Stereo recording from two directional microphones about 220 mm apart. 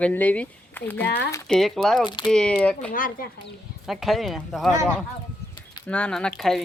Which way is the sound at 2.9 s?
40° left (ahead or behind).